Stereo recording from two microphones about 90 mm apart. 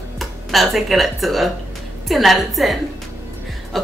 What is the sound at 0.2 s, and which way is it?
Speech, centre (ahead or behind).